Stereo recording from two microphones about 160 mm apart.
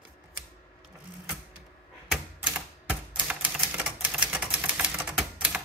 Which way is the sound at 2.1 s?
5° right (ahead or behind).